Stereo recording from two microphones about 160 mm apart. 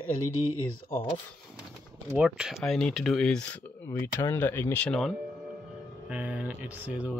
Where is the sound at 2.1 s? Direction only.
5° right (ahead or behind).